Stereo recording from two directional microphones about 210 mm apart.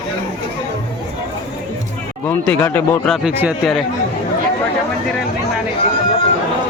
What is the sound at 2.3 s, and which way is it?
Speech, 10° left (ahead or behind).